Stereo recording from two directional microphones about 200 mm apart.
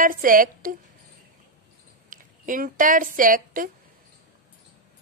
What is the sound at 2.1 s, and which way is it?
A woman's voice, 40° right (ahead or behind).